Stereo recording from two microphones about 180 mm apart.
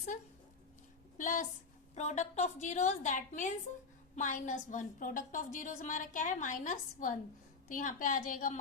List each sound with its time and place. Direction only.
1.2 s a woman's voice: 45° left (ahead or behind)